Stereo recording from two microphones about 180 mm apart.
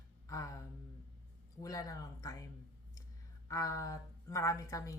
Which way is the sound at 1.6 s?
20° left (ahead or behind).